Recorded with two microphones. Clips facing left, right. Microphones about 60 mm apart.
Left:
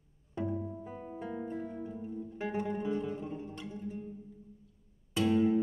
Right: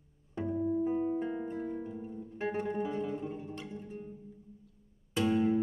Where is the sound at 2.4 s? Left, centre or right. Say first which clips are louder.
Right 1 dB; right.